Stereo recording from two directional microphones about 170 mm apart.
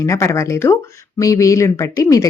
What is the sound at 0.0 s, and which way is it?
A woman's voice, 15° left (ahead or behind).